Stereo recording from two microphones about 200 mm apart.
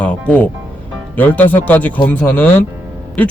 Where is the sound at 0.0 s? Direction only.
5° left (ahead or behind).